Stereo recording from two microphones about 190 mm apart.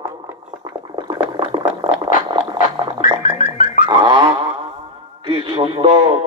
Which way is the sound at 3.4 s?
40° left (ahead or behind).